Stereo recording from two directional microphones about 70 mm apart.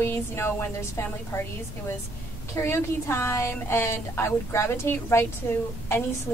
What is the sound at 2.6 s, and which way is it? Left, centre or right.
A woman's voice, left.